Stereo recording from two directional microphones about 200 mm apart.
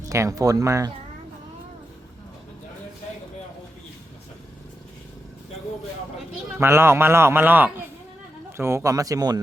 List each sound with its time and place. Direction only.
0.0 s a man's voice: 15° right (ahead or behind)
6.6 s a man's voice: 10° right (ahead or behind)